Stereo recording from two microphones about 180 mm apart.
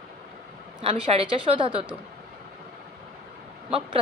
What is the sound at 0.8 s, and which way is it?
A woman's voice, 30° right (ahead or behind).